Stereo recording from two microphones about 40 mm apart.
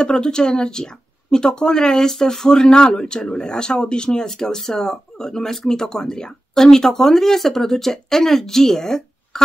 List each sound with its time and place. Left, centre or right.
0.0 s speech: left
4.3 s speech: centre